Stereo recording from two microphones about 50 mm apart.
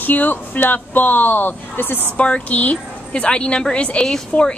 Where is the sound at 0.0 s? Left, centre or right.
Left.